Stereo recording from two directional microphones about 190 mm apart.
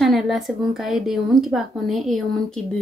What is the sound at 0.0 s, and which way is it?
Speech, centre (ahead or behind).